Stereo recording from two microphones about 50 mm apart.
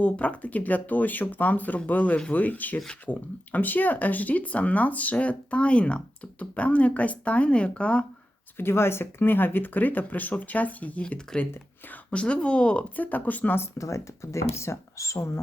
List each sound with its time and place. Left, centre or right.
0.0 s speech: left
8.5 s speech: left
12.1 s speech: left
13.7 s speech: left